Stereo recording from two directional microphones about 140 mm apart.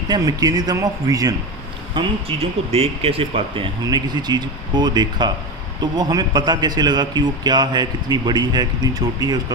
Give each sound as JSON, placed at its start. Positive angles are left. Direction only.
{"t": 0.1, "sound": "a man's voice", "side_deg": -30}
{"t": 2.0, "sound": "speech", "side_deg": -40}
{"t": 3.8, "sound": "a man's voice", "side_deg": -30}